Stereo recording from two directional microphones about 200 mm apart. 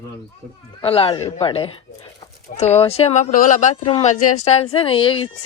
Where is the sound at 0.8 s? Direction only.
30° left (ahead or behind).